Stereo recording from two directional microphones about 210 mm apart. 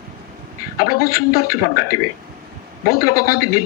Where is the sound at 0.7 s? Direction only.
45° left (ahead or behind).